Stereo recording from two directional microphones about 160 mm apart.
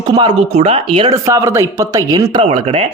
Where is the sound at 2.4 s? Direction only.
35° right (ahead or behind).